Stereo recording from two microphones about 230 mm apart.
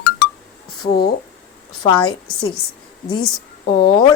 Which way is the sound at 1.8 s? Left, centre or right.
Left.